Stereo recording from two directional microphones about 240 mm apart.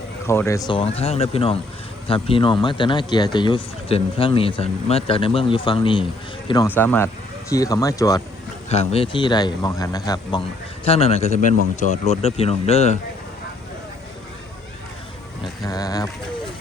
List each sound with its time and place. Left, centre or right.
0.3 s speech: centre
0.7 s speech: left
8.7 s speech: left
15.6 s a sound: centre